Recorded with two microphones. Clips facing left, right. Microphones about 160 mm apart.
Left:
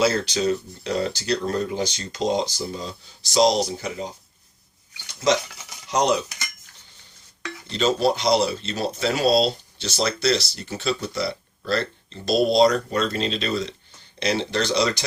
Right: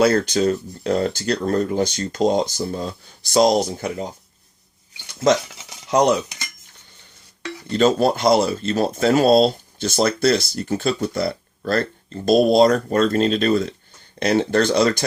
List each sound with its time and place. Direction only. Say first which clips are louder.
0.0 s speech: right 5 dB; 55° right (ahead or behind)
5.9 s speech: right 4 dB; 55° right (ahead or behind)
7.7 s speech: right 4 dB; 50° right (ahead or behind)